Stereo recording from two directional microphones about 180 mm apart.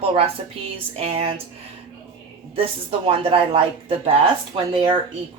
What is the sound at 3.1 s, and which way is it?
A woman's voice, 30° right (ahead or behind).